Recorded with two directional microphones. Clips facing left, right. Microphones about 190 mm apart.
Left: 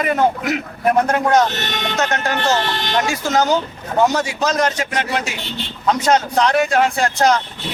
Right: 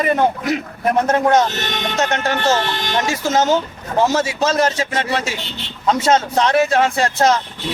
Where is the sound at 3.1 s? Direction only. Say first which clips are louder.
Right 2 dB; 20° right (ahead or behind).